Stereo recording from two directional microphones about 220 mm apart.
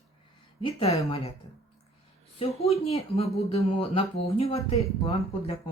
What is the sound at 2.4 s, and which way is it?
Speech, 25° left (ahead or behind).